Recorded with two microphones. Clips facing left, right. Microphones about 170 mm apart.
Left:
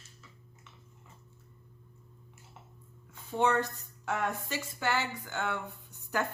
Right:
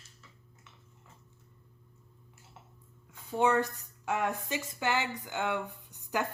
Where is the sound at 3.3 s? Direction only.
10° right (ahead or behind).